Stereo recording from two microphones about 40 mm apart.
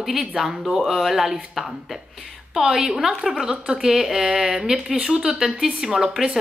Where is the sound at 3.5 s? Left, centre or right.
Right.